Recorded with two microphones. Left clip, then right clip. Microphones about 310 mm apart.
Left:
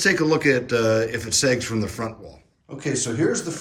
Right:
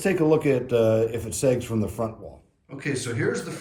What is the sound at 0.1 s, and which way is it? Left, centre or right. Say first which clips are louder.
Speech: even; centre.